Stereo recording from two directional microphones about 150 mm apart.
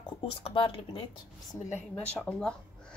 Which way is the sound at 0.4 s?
35° left (ahead or behind).